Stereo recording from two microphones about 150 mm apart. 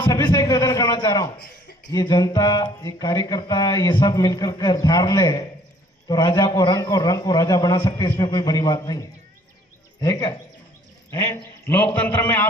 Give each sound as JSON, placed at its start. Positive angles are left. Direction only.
{"t": 0.0, "sound": "a man's voice", "side_deg": 25}
{"t": 11.6, "sound": "a man's voice", "side_deg": 15}